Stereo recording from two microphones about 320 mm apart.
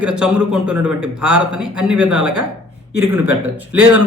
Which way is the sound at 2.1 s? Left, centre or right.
Right.